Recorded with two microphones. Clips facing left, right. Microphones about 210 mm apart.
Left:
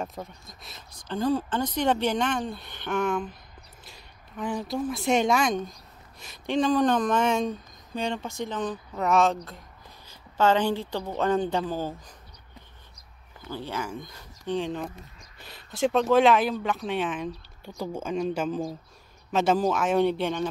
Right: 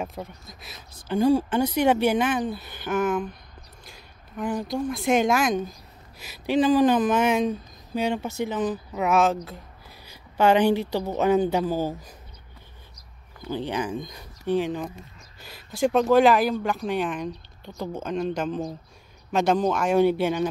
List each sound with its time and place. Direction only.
0.0 s a woman's voice: centre (ahead or behind)
13.5 s speech: 20° right (ahead or behind)